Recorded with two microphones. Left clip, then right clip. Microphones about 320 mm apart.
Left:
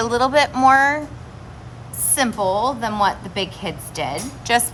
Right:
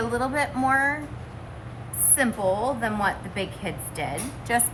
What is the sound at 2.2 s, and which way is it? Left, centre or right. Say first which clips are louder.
A woman's voice: left 5 dB; centre.